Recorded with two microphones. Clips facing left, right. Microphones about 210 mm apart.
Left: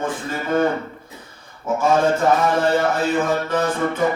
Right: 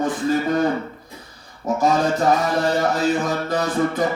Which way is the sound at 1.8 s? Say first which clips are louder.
Left 1 dB; 35° right (ahead or behind).